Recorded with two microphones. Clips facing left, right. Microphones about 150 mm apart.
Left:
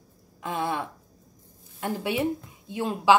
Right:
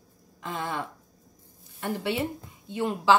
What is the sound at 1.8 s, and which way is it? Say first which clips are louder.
A woman's voice: left 1 dB; 15° left (ahead or behind).